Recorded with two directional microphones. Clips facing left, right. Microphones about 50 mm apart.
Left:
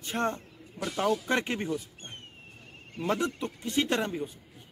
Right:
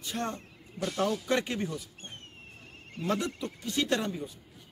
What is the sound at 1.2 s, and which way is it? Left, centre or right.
A man's voice, left.